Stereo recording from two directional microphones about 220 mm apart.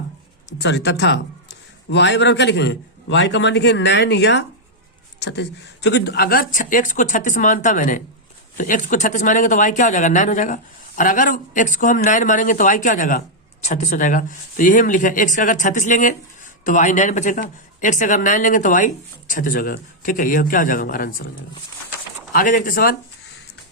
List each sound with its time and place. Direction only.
0.6 s a man's voice: 50° left (ahead or behind)
22.3 s speech: 40° left (ahead or behind)